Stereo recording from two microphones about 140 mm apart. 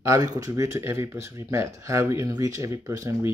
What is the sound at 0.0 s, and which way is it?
Speech, 25° right (ahead or behind).